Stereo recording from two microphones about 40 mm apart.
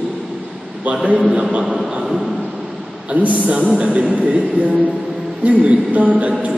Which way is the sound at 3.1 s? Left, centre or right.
Right.